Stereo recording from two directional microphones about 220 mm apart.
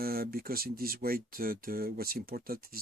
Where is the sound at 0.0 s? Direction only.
45° right (ahead or behind).